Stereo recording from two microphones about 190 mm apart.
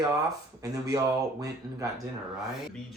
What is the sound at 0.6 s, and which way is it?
Speech, 20° right (ahead or behind).